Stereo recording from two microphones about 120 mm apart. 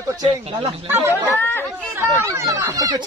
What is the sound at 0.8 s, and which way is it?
Speech, 20° right (ahead or behind).